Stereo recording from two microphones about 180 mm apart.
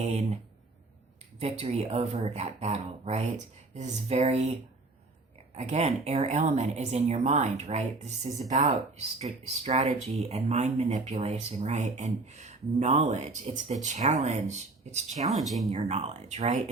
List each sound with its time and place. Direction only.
0.0 s speech: 40° right (ahead or behind)
1.4 s speech: 35° right (ahead or behind)
5.5 s speech: 40° right (ahead or behind)
15.3 s speech: centre (ahead or behind)
15.8 s speech: 35° right (ahead or behind)